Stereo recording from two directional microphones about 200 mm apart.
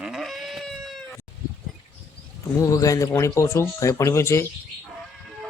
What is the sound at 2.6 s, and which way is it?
Speech, 15° left (ahead or behind).